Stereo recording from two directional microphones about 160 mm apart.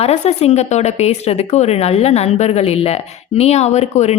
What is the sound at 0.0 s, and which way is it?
Speech, 40° left (ahead or behind).